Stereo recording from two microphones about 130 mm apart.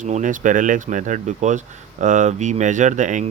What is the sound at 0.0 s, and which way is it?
Speech, 75° right (ahead or behind).